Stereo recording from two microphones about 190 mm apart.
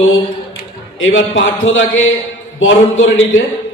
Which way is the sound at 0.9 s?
90° left.